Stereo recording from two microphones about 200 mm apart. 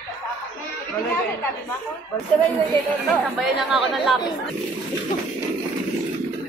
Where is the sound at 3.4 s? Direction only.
Centre (ahead or behind).